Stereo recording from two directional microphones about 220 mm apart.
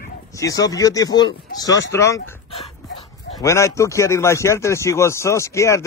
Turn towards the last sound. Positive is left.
turn(degrees=15)  # may be behind; listen again after turning